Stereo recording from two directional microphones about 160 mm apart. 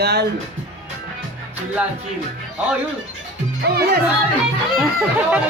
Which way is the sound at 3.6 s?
80° right.